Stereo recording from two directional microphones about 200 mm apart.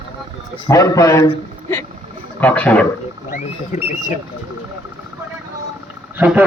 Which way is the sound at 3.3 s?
40° left (ahead or behind).